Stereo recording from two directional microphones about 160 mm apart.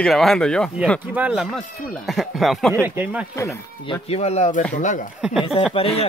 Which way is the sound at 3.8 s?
35° left (ahead or behind).